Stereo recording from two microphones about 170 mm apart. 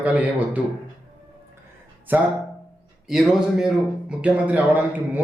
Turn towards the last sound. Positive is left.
turn(degrees=-10)  # may be behind; listen again after turning